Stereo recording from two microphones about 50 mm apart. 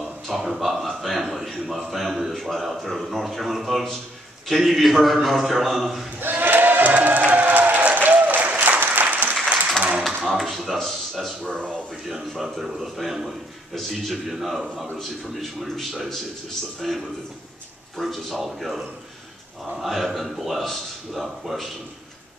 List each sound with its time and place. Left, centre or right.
0.3 s a sound: centre
4.5 s a man's voice: centre
6.1 s a sound: right
7.1 s applause: right
10.3 s tap: centre
11.4 s speech: right
12.1 s a man's voice: centre